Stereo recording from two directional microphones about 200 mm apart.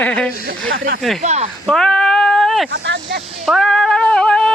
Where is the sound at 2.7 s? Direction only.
60° right (ahead or behind).